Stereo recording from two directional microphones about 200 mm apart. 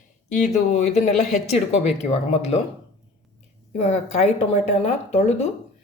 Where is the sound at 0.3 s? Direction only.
35° left (ahead or behind).